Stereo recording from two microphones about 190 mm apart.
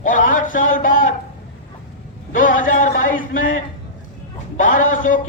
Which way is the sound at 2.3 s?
45° left (ahead or behind).